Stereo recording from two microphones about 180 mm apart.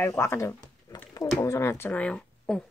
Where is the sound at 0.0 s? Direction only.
15° left (ahead or behind).